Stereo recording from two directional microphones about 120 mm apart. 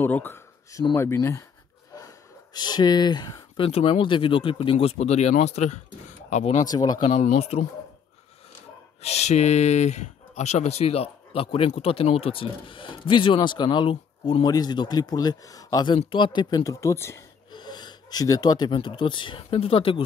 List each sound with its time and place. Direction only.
0.0 s speech: 15° left (ahead or behind)
2.0 s speech: 35° left (ahead or behind); by 6.7 s 80° left
6.7 s speech: 35° left (ahead or behind)
7.1 s speech: 70° left (ahead or behind)
9.0 s speech: 65° left (ahead or behind); by 16.0 s 35° left (ahead or behind)
16.0 s speech: 45° left (ahead or behind); by 17.2 s 20° left (ahead or behind)
17.5 s speech: 35° left (ahead or behind)